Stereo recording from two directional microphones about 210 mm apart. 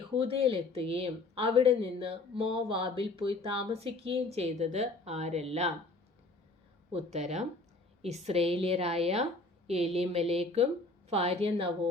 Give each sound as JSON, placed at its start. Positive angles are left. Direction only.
{"t": 0.2, "sound": "speech", "side_deg": -25}
{"t": 6.9, "sound": "speech", "side_deg": -30}